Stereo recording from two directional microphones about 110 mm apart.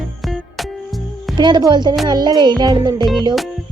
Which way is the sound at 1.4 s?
45° right (ahead or behind).